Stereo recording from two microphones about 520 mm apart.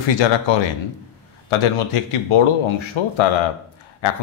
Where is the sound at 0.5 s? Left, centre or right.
Left.